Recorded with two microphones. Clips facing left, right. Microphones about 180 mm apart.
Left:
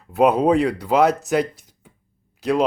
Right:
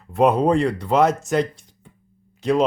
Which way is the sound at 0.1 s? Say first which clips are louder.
Left 1 dB; centre (ahead or behind).